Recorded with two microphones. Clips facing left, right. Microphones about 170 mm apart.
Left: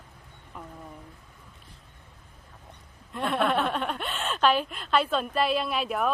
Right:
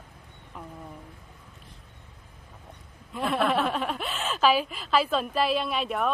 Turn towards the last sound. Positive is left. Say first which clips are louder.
# even
turn(degrees=0)  # may be behind; listen again after turning